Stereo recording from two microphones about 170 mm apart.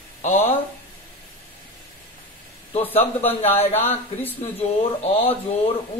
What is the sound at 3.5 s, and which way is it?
Speech, 40° left (ahead or behind).